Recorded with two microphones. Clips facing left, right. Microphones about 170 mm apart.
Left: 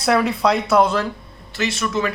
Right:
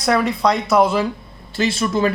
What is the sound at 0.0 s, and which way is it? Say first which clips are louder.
Speech: even; centre (ahead or behind).